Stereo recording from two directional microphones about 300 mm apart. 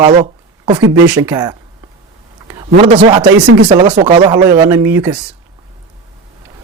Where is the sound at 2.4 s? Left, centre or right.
Centre.